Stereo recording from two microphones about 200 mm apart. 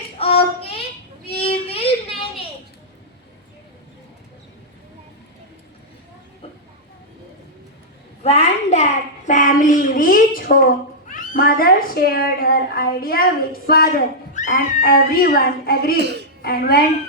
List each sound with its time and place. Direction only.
0.2 s child singing: 30° left (ahead or behind)
1.4 s music: 30° left (ahead or behind)
8.2 s a child's voice: 30° left (ahead or behind); by 16.0 s 50° left (ahead or behind)
16.0 s speech: 55° right (ahead or behind)
16.4 s speech: 50° left (ahead or behind)